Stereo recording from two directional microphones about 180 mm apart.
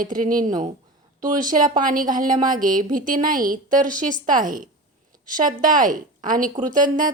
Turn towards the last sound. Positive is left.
turn(degrees=-45)  # may be behind; listen again after turning